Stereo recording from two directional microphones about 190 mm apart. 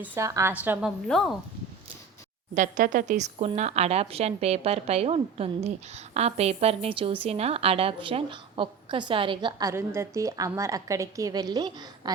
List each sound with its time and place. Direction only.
0.0 s a woman's voice: 10° right (ahead or behind)
2.6 s a woman's voice: 45° right (ahead or behind); by 12.1 s 20° right (ahead or behind)